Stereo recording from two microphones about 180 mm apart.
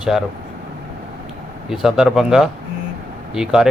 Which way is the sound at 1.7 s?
Centre (ahead or behind).